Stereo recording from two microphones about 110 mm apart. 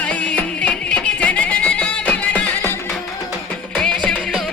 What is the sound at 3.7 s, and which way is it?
Music, 10° left (ahead or behind).